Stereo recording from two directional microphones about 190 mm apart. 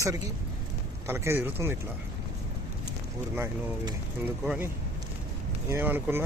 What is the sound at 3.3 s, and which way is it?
Speech, 15° right (ahead or behind).